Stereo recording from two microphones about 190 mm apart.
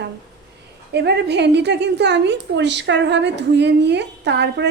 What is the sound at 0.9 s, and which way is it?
A woman's voice, 60° right (ahead or behind).